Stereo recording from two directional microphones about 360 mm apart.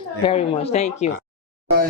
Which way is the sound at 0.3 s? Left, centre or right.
Centre.